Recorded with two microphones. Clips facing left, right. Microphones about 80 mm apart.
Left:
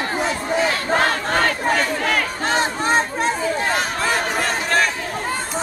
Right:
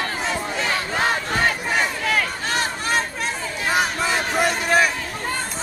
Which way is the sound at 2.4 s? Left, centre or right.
Left.